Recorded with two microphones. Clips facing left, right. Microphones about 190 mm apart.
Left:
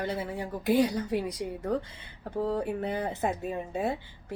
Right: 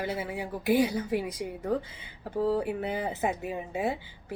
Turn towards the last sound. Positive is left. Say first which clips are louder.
# even
turn(degrees=-5)  # may be behind; listen again after turning